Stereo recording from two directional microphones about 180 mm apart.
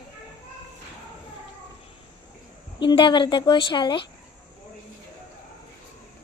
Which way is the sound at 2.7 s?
25° left (ahead or behind).